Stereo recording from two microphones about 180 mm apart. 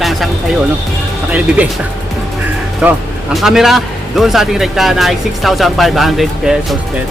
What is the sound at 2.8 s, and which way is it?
A man's voice, 10° right (ahead or behind).